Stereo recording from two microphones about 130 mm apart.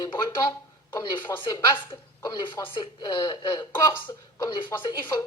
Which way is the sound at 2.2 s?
35° left (ahead or behind).